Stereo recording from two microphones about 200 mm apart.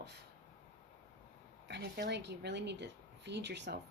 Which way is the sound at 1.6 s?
60° right (ahead or behind).